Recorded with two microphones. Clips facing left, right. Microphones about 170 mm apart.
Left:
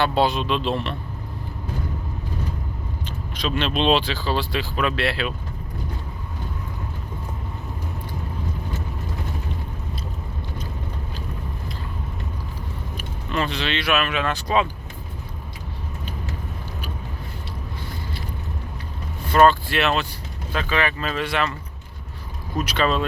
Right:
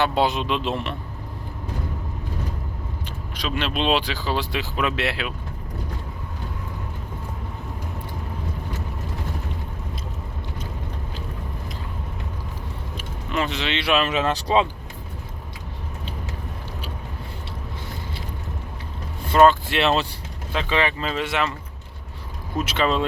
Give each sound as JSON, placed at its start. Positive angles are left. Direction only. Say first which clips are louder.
{"t": 0.0, "sound": "speech", "louder": "left 1 dB", "side_deg": -15}
{"t": 3.1, "sound": "speech", "louder": "left 3 dB", "side_deg": -10}
{"t": 13.3, "sound": "speech", "louder": "even", "side_deg": -20}
{"t": 19.3, "sound": "speech", "louder": "right 1 dB", "side_deg": -20}
{"t": 22.5, "sound": "speech", "louder": "even", "side_deg": -20}